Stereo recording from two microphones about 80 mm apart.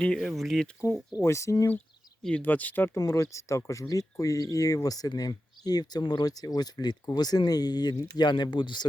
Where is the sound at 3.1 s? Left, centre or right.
Left.